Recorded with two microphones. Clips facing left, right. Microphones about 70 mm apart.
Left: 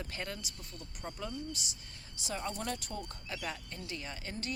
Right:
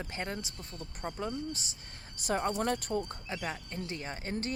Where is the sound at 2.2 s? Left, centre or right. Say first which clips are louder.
Right 8 dB; right.